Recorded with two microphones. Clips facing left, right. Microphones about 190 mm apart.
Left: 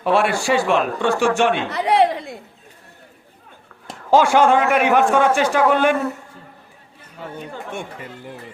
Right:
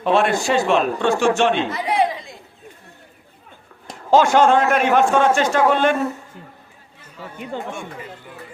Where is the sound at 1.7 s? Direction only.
65° left (ahead or behind).